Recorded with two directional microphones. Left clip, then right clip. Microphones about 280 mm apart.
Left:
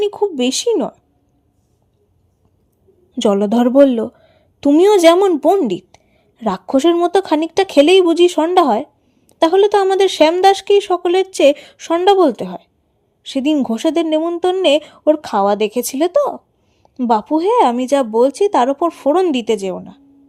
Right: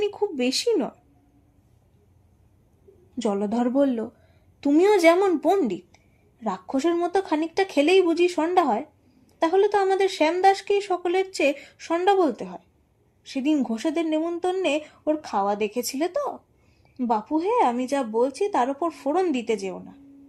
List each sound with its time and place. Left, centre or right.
0.0 s speech: left
3.2 s a woman's voice: left